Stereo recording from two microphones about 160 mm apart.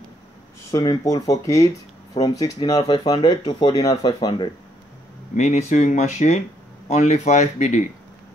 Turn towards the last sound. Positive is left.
turn(degrees=45)  # may be behind; listen again after turning